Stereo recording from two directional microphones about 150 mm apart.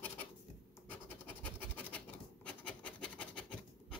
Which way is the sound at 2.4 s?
5° left (ahead or behind).